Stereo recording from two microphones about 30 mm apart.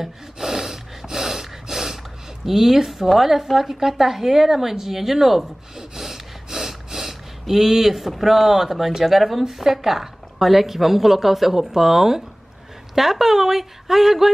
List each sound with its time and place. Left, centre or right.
0.4 s snort: centre
2.4 s a woman's voice: centre